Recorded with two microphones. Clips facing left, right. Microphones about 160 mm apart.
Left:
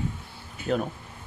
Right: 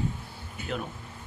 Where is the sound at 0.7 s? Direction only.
40° left (ahead or behind).